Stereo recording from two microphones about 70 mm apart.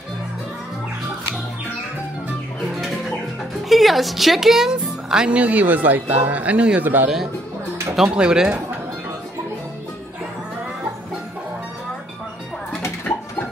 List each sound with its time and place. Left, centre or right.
3.6 s speech: centre; by 7.1 s right
7.9 s speech: centre